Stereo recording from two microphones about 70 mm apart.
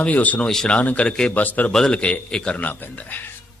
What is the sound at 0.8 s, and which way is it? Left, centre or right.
Speech, left.